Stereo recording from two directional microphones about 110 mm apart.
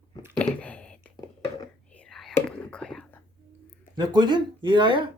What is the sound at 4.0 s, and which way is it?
Speech, 40° right (ahead or behind).